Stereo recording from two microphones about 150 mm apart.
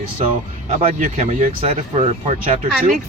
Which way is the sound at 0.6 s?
45° right (ahead or behind).